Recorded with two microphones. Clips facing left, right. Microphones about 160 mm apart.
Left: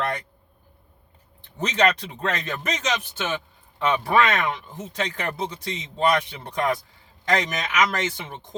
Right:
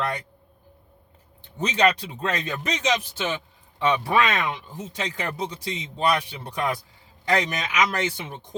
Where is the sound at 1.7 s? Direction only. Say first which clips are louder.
Even; 15° right (ahead or behind).